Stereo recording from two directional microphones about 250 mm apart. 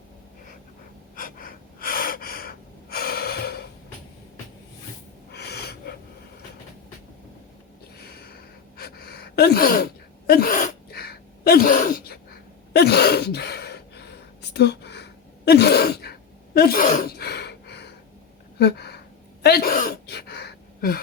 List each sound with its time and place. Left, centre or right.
1.1 s gasp: left
5.3 s snort: left
7.9 s a sound: left
8.8 s sneeze: left
14.5 s gasp: left
18.6 s a sound: left
19.4 s gasp: left